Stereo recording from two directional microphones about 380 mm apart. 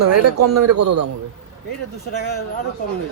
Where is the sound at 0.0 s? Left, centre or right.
Right.